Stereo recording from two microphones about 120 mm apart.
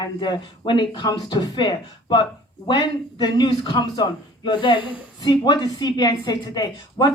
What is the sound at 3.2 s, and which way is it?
Speech, 40° left (ahead or behind).